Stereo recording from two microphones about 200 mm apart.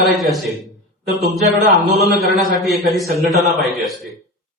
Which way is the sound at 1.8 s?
50° right (ahead or behind).